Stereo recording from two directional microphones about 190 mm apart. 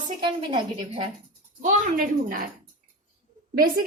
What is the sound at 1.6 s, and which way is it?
Speech, 40° right (ahead or behind).